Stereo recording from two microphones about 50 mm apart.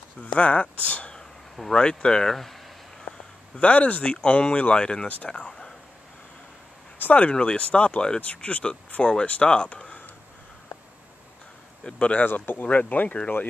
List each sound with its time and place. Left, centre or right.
0.3 s speech: left
1.1 s speech: centre
2.3 s speech: centre
3.1 s speech: left
7.0 s speech: left
7.2 s speech: left
11.8 s speech: left
12.3 s speech: left